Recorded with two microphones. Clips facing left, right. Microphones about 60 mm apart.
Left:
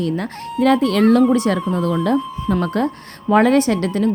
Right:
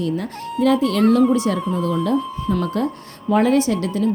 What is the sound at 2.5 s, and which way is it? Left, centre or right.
A woman's voice, left.